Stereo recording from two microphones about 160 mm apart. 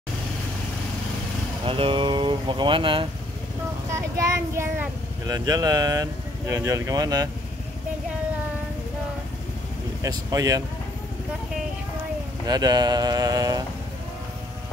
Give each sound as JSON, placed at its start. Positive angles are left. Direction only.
{"t": 1.7, "sound": "speech", "side_deg": -35}
{"t": 3.9, "sound": "a child's voice", "side_deg": -20}
{"t": 10.0, "sound": "speech", "side_deg": -20}
{"t": 12.4, "sound": "speech", "side_deg": -25}